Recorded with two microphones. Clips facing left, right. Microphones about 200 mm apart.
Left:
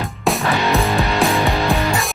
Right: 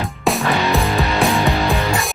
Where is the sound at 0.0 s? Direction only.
Centre (ahead or behind).